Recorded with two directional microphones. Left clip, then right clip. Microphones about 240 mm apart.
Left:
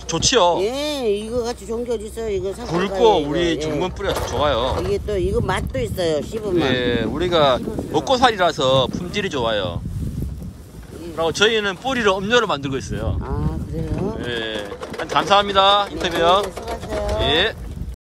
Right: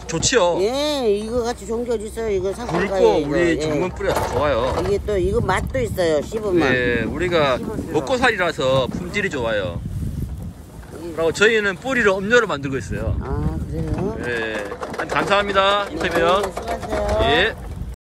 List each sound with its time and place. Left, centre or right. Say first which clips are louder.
0.1 s speech: left 2 dB; centre
4.6 s speech: right 1 dB; centre
4.9 s speech: right 1 dB; centre
11.1 s speech: right 1 dB; centre
14.0 s clip-clop: right 1 dB; centre
15.1 s speech: left 2 dB; centre
16.6 s pigeon: right 2 dB; centre
17.2 s speech: right 1 dB; centre